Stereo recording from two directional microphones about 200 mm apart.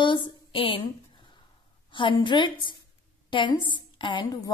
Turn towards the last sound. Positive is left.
turn(degrees=25)  # may be behind; listen again after turning